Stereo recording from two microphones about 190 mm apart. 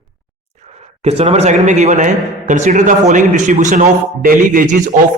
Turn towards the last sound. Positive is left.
turn(degrees=-40)  # may be behind; listen again after turning